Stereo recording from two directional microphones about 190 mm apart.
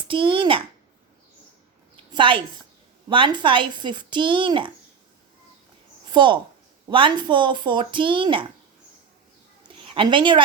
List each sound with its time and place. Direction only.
0.1 s speech: 25° right (ahead or behind)
2.1 s a woman's voice: 25° right (ahead or behind)
6.1 s a woman's voice: 25° right (ahead or behind)
9.6 s a sound: 25° right (ahead or behind)